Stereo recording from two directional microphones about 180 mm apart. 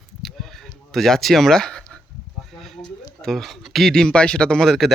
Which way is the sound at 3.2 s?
Centre (ahead or behind).